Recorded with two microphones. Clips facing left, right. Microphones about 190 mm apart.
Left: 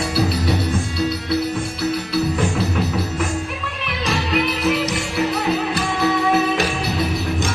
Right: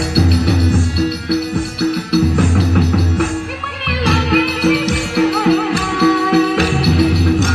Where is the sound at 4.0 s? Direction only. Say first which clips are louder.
Right 6 dB; 75° right (ahead or behind).